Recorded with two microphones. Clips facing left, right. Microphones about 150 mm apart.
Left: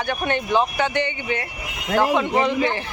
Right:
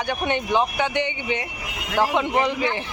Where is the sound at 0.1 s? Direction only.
15° right (ahead or behind).